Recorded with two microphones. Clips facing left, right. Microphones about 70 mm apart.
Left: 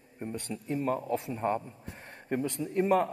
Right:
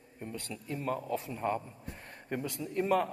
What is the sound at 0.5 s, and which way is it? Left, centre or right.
Speech, left.